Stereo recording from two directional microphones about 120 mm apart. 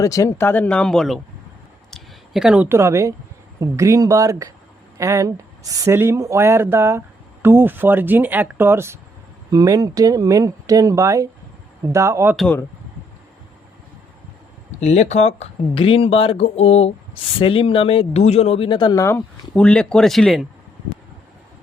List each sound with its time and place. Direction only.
0.0 s speech: 25° left (ahead or behind); by 1.2 s 5° left (ahead or behind)
1.9 s a sound: 5° right (ahead or behind)
2.6 s speech: 20° right (ahead or behind)
9.5 s speech: 30° right (ahead or behind)
14.8 s speech: 70° left (ahead or behind)
15.7 s speech: 50° left (ahead or behind)
17.4 s speech: 50° left (ahead or behind)
18.9 s speech: 20° left (ahead or behind)
19.5 s speech: 10° left (ahead or behind)